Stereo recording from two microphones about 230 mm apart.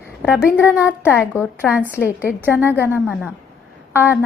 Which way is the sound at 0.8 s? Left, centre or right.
Centre.